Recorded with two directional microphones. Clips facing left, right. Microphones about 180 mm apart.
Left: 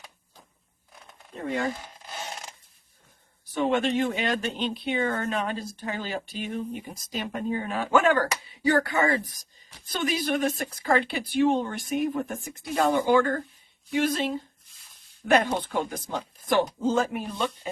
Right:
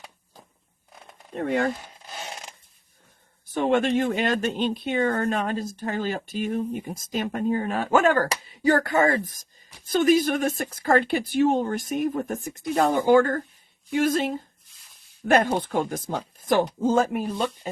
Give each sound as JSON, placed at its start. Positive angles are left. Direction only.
{"t": 1.4, "sound": "speech", "side_deg": -60}
{"t": 3.5, "sound": "speech", "side_deg": -50}
{"t": 15.5, "sound": "speech", "side_deg": -45}